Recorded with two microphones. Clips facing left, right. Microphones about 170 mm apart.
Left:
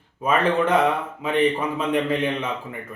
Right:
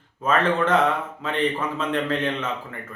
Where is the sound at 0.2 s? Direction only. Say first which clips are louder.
Left 1 dB; 10° left (ahead or behind).